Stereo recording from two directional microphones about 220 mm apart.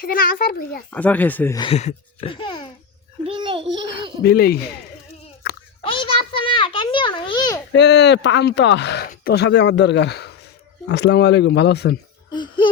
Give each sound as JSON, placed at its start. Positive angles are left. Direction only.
{"t": 0.0, "sound": "speech", "side_deg": 40}
{"t": 0.9, "sound": "speech", "side_deg": 5}
{"t": 1.5, "sound": "speech", "side_deg": 25}
{"t": 3.2, "sound": "a child's voice", "side_deg": -20}
{"t": 4.2, "sound": "speech", "side_deg": 45}
{"t": 5.4, "sound": "a sound", "side_deg": 45}
{"t": 5.8, "sound": "a sound", "side_deg": 25}
{"t": 7.7, "sound": "speech", "side_deg": 50}
{"t": 12.3, "sound": "laughter", "side_deg": 20}